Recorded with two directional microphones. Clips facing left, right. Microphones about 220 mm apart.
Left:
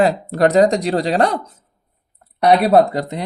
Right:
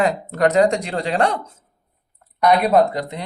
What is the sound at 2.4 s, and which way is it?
Speech, 35° left (ahead or behind).